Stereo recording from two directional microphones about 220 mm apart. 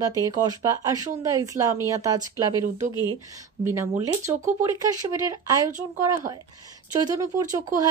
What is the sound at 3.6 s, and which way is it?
Speech, 15° right (ahead or behind).